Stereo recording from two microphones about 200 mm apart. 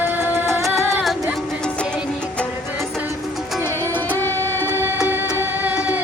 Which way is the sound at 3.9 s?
10° left (ahead or behind).